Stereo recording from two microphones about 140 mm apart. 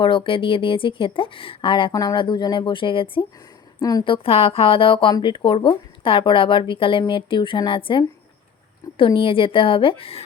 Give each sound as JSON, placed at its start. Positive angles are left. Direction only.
{"t": 0.0, "sound": "speech", "side_deg": 40}
{"t": 3.8, "sound": "a woman's voice", "side_deg": 25}
{"t": 4.0, "sound": "speech", "side_deg": 40}